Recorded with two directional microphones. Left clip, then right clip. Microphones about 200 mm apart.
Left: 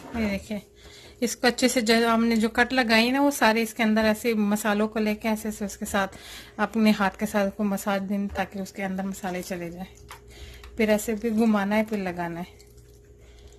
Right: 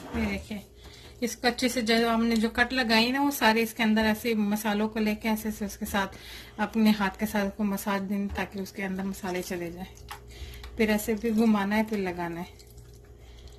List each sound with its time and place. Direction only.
0.2 s speech: 55° left (ahead or behind); by 12.4 s 30° left (ahead or behind)